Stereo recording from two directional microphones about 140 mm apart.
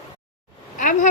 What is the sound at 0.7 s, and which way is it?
Speech, 70° left (ahead or behind).